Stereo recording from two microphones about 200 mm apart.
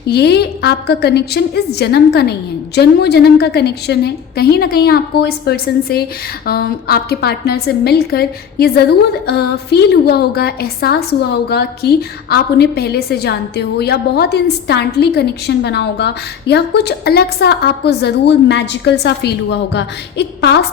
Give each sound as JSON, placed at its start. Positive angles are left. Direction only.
{"t": 0.1, "sound": "a woman's voice", "side_deg": 55}